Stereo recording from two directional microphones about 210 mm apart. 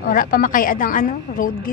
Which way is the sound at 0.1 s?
45° left (ahead or behind).